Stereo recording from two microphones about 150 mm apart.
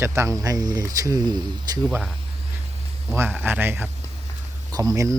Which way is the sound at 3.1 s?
15° right (ahead or behind).